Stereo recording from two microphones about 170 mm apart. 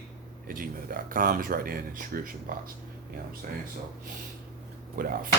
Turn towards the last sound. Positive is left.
turn(degrees=-55)  # may be behind; listen again after turning